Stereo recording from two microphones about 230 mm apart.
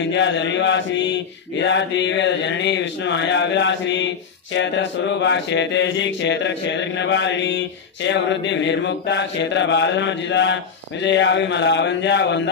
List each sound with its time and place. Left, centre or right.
0.0 s mantra: left